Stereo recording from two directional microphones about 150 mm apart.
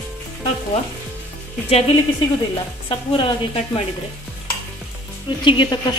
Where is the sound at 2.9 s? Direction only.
35° left (ahead or behind).